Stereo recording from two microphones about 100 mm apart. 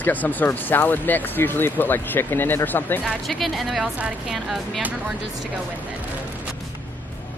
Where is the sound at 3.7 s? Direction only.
10° right (ahead or behind).